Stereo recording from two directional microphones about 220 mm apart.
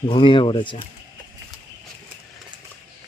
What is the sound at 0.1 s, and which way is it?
Speech, 25° left (ahead or behind).